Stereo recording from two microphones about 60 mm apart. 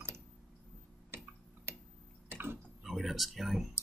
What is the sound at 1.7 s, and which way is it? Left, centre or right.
Tick-tock, right.